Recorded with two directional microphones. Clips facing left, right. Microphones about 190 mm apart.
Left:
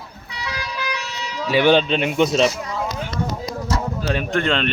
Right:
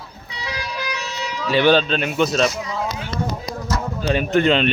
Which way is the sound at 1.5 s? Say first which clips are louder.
Even; 15° left (ahead or behind).